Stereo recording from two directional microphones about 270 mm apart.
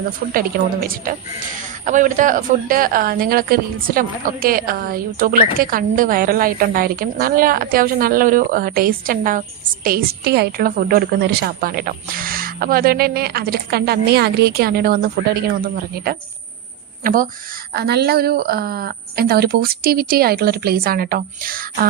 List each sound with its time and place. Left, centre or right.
0.3 s a woman's voice: right